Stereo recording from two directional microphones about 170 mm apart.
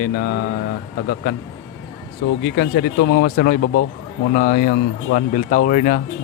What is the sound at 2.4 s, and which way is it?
Speech, 80° left.